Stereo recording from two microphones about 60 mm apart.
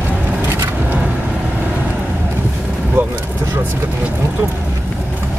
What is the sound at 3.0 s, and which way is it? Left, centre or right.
Vehicle, right.